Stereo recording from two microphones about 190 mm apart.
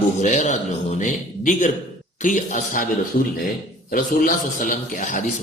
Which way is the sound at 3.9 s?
45° left (ahead or behind).